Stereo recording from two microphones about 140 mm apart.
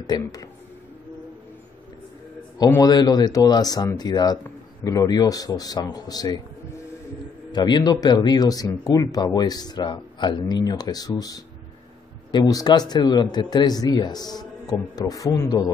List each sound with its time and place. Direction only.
0.0 s speech: 30° left (ahead or behind)
2.8 s speech: 30° left (ahead or behind)
7.5 s speech: 30° left (ahead or behind)